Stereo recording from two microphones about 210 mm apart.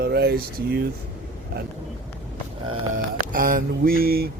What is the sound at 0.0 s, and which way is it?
Speech, 50° right (ahead or behind).